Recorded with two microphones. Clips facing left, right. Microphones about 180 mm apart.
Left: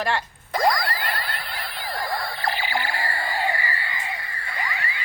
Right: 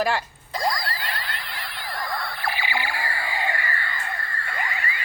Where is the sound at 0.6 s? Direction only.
50° left (ahead or behind).